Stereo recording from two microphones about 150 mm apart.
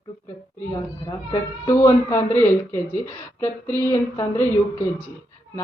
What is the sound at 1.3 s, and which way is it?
Speech, 20° left (ahead or behind).